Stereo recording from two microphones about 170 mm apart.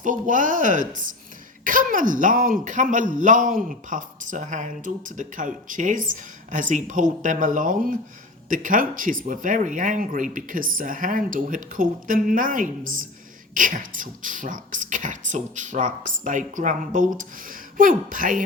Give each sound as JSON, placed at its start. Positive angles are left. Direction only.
{"t": 0.0, "sound": "speech", "side_deg": -50}